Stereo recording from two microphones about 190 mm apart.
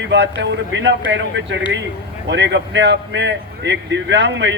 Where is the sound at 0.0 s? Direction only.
65° right (ahead or behind).